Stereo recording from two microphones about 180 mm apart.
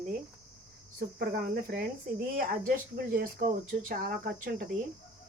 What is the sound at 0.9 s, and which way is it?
Speech, 55° right (ahead or behind).